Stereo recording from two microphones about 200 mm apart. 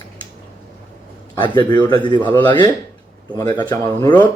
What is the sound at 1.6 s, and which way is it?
Speech, 20° left (ahead or behind).